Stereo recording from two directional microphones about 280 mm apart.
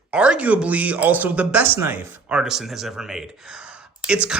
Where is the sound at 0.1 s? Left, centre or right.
Centre.